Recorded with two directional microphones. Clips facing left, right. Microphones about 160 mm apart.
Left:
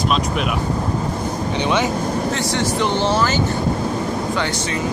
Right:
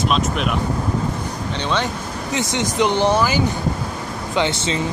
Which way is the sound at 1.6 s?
15° left (ahead or behind).